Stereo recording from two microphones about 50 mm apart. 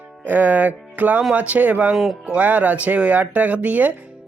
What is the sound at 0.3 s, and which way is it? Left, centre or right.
Speech, right.